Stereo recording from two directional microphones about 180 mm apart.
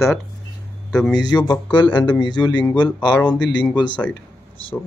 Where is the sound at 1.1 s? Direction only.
20° left (ahead or behind).